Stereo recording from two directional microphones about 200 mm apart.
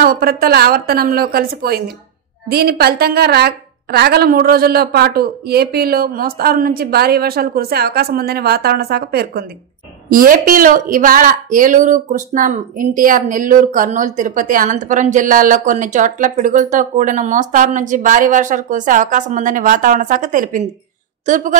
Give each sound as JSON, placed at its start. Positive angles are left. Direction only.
{"t": 0.0, "sound": "a woman's voice", "side_deg": -45}